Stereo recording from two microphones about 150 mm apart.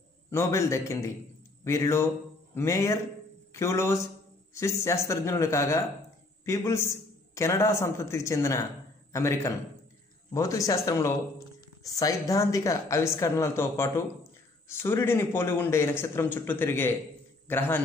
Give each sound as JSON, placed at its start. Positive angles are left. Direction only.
{"t": 0.3, "sound": "a woman's voice", "side_deg": 20}